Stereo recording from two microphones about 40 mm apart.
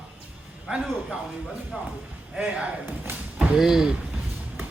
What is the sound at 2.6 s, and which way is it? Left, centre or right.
Speech, right.